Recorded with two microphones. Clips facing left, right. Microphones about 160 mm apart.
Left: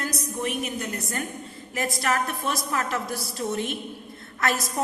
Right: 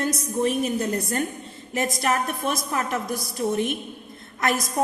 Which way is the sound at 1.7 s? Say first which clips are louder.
Right 2 dB; 20° right (ahead or behind).